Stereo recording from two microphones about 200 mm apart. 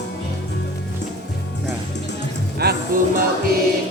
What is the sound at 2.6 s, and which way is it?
Music, 50° right (ahead or behind).